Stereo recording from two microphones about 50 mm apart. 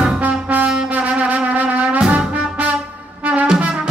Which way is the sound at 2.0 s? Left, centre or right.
Centre.